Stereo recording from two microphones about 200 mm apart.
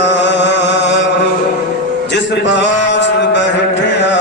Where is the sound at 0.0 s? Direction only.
60° left (ahead or behind).